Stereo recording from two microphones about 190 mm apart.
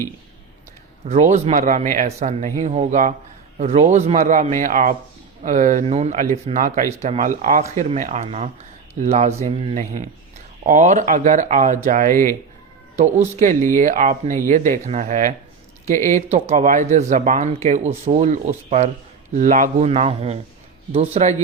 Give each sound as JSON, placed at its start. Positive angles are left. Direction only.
{"t": 1.0, "sound": "speech", "side_deg": -40}
{"t": 13.4, "sound": "speech", "side_deg": -40}